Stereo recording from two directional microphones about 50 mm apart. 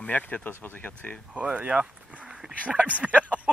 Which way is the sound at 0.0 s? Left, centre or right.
Left.